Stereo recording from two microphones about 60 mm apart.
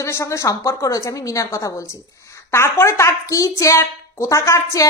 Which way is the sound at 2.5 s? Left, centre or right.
Left.